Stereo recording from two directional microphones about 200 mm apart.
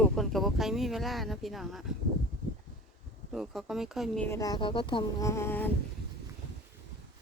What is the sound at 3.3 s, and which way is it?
Speech, centre (ahead or behind).